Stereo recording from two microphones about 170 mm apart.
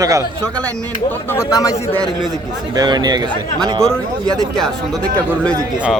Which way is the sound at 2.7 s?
25° right (ahead or behind).